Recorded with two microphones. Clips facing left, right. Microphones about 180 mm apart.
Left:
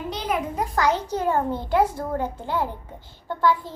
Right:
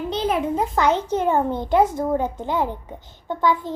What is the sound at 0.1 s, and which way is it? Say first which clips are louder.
A child's voice: right 5 dB; 25° right (ahead or behind).